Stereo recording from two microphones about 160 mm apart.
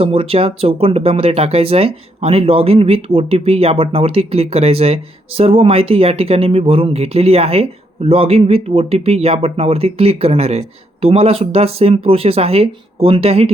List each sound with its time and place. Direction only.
0.0 s speech: 35° right (ahead or behind)